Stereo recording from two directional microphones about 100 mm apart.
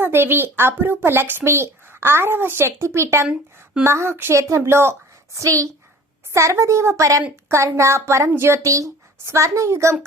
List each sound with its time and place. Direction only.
0.0 s a woman's voice: 20° right (ahead or behind)